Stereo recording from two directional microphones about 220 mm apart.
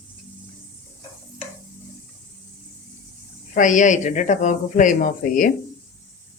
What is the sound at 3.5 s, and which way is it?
Speech, 35° left (ahead or behind).